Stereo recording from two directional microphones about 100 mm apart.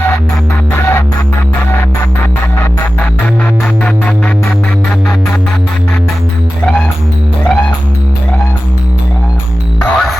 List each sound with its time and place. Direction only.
0.7 s music: 20° left (ahead or behind)
9.8 s music: 10° left (ahead or behind)